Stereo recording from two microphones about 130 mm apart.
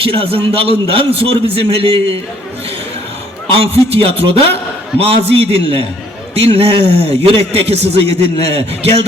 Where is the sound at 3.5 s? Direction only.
50° right (ahead or behind).